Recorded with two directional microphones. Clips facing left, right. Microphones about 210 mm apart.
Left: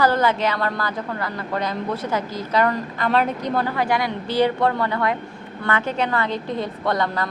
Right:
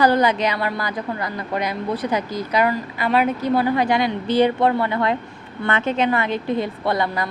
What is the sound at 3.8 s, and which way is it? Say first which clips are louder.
A woman's voice: right 3 dB; 20° right (ahead or behind).